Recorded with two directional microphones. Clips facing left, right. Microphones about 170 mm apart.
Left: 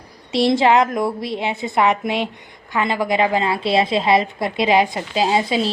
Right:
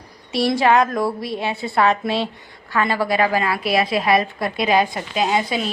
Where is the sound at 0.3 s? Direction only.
25° left (ahead or behind).